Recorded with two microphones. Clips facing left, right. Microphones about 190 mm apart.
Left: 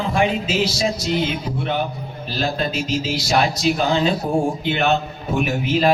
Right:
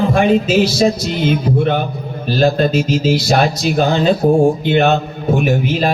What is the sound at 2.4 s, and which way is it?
Speech, 50° right (ahead or behind).